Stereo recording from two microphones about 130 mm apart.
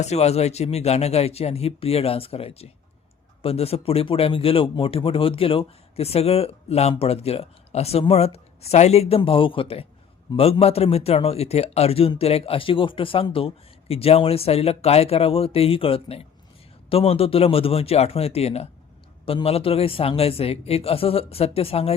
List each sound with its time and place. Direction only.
0.0 s speech: 55° left (ahead or behind)